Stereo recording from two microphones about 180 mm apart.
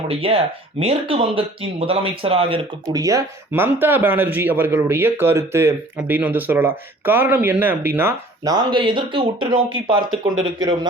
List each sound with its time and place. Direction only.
0.1 s speech: 30° right (ahead or behind)